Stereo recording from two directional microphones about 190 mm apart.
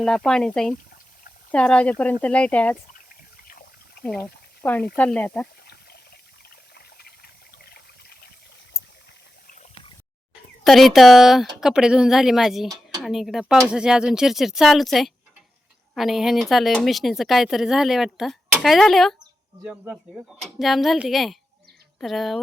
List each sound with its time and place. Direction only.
0.0 s speech: 5° left (ahead or behind)
3.4 s water: 50° left (ahead or behind)
4.0 s speech: 5° left (ahead or behind)
5.6 s a sound: 55° left (ahead or behind)
6.5 s trickle: 55° left (ahead or behind)
10.6 s speech: centre (ahead or behind)
12.6 s a sound: 20° right (ahead or behind)
13.0 s speech: centre (ahead or behind)
13.7 s speech: 5° right (ahead or behind)